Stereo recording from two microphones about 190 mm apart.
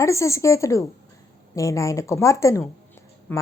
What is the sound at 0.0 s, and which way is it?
A woman's voice, 15° left (ahead or behind).